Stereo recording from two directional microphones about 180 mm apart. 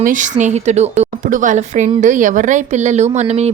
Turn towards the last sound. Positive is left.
turn(degrees=-35)  # may be behind; listen again after turning